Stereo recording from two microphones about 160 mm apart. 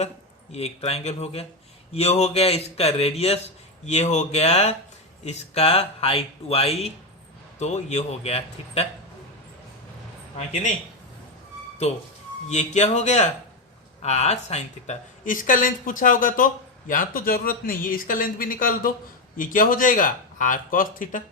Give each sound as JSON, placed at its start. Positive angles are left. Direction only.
{"t": 0.5, "sound": "a man's voice", "side_deg": 40}
{"t": 10.3, "sound": "speech", "side_deg": 45}
{"t": 12.5, "sound": "speech", "side_deg": 45}